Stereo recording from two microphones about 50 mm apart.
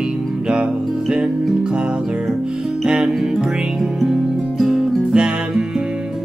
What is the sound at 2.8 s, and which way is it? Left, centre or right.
Music, centre.